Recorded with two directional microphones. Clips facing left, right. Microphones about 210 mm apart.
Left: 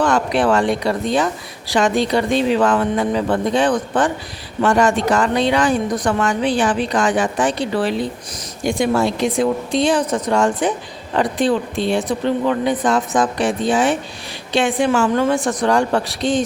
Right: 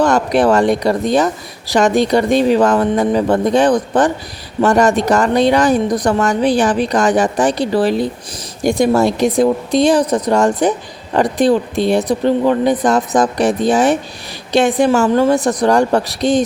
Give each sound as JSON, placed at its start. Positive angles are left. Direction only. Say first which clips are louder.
{"t": 0.0, "sound": "a woman's voice", "louder": "right 4 dB", "side_deg": -40}